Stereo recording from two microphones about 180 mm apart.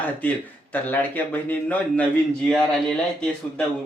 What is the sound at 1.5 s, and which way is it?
Speech, 10° left (ahead or behind).